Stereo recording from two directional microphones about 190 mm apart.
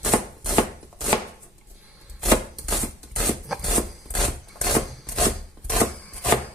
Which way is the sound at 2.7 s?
Centre (ahead or behind).